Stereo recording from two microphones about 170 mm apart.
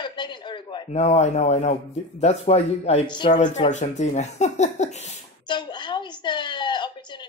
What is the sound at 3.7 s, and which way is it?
Speech, 45° left (ahead or behind).